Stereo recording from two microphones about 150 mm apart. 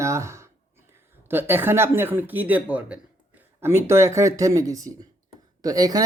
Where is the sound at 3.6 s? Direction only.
15° right (ahead or behind).